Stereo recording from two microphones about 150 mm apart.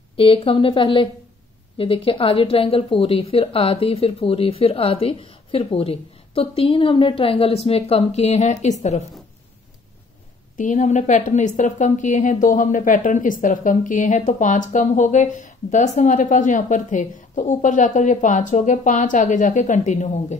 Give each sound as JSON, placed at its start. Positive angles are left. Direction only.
{"t": 0.1, "sound": "a woman's voice", "side_deg": 40}
{"t": 10.6, "sound": "a woman's voice", "side_deg": 55}